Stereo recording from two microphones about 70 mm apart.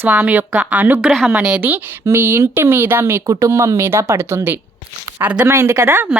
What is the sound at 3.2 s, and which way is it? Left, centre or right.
A woman's voice, right.